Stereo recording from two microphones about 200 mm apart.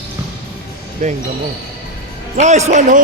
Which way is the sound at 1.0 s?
35° right (ahead or behind).